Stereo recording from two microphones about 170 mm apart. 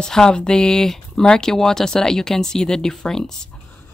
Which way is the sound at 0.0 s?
5° left (ahead or behind).